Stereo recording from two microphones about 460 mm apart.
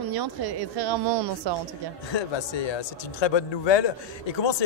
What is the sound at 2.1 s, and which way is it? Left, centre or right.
Speech, left.